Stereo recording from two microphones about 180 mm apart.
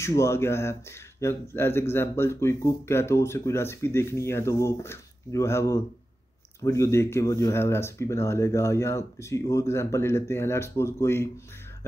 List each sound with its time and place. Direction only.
0.0 s speech: 15° left (ahead or behind)